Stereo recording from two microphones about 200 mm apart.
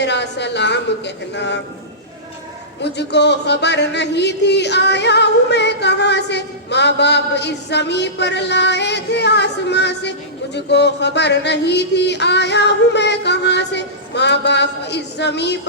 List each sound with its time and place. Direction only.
0.0 s speech: 60° left (ahead or behind)
2.8 s speech: 60° left (ahead or behind)